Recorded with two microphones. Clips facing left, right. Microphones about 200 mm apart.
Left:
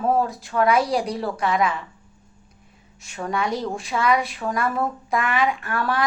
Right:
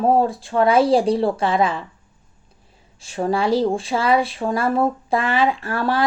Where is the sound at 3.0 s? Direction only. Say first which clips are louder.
Right 6 dB; 30° right (ahead or behind).